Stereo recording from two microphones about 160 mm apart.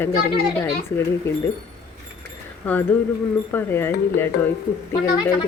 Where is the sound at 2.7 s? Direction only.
10° left (ahead or behind).